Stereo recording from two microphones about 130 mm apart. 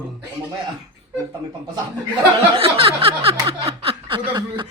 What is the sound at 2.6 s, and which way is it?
Speech, 45° right (ahead or behind).